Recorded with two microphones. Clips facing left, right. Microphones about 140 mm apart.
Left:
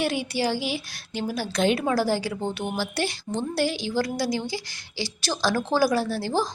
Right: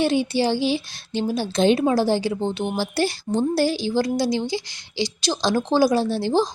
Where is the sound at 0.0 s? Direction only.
25° right (ahead or behind).